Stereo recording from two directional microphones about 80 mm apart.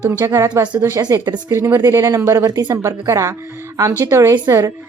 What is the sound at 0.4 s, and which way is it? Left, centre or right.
Speech, right.